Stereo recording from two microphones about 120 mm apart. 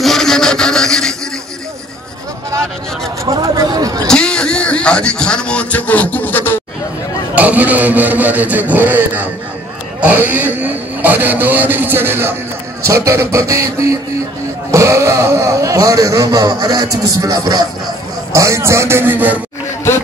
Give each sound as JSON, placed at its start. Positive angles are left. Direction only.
{"t": 0.0, "sound": "a sound", "side_deg": 5}
{"t": 3.3, "sound": "speech", "side_deg": -30}
{"t": 4.1, "sound": "a man's voice", "side_deg": 5}
{"t": 7.3, "sound": "speech", "side_deg": -15}